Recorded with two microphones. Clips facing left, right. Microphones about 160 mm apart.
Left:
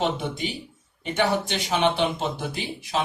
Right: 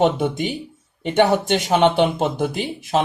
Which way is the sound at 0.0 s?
50° right (ahead or behind).